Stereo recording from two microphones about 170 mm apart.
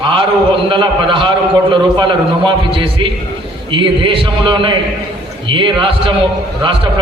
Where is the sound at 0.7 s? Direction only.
30° right (ahead or behind).